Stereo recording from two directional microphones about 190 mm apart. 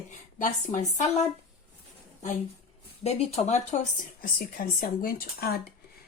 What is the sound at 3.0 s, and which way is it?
Speech, 35° left (ahead or behind).